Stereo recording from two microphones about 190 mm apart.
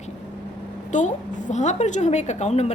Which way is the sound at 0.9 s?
40° left (ahead or behind).